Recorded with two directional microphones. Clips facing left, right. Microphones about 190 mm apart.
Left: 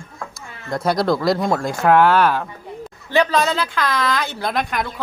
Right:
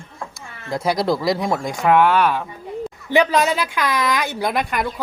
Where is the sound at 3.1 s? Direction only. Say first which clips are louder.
Right 1 dB; 15° right (ahead or behind).